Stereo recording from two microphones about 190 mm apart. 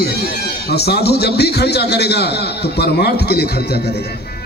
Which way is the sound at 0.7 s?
55° left (ahead or behind).